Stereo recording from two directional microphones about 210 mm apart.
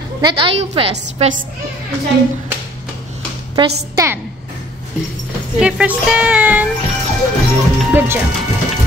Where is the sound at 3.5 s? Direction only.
15° right (ahead or behind).